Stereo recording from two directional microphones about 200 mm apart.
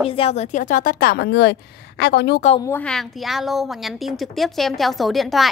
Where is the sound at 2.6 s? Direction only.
10° left (ahead or behind).